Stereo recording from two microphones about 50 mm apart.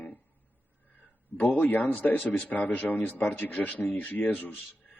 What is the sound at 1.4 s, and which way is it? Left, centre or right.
A man's voice, left.